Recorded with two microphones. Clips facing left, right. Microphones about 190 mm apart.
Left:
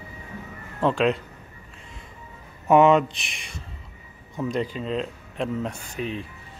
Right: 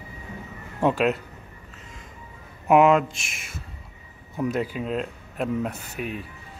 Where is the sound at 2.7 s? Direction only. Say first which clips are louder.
Left 1 dB; centre (ahead or behind).